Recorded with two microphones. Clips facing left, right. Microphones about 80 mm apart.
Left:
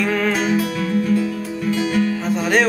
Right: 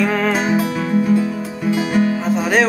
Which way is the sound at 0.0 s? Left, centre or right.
Centre.